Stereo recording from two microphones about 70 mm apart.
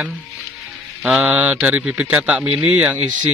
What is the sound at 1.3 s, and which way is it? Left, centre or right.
Speech, right.